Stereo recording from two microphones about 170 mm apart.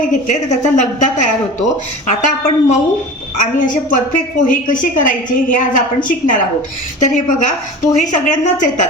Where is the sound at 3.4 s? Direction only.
50° left (ahead or behind).